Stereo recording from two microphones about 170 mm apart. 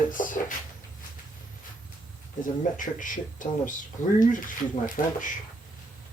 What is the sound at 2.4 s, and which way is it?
Speech, 50° left (ahead or behind).